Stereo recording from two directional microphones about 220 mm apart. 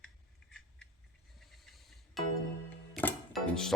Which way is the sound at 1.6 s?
Centre (ahead or behind).